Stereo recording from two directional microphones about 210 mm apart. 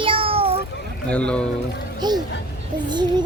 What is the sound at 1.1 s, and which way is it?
Speech, 5° left (ahead or behind).